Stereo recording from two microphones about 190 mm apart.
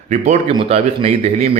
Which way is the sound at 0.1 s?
40° right (ahead or behind).